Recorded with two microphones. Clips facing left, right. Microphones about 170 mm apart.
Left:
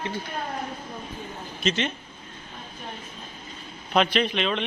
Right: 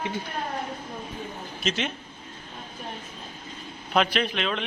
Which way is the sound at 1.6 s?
Centre (ahead or behind).